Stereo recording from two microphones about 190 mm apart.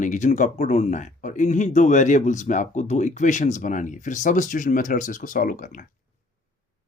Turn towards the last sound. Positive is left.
turn(degrees=45)  # may be behind; listen again after turning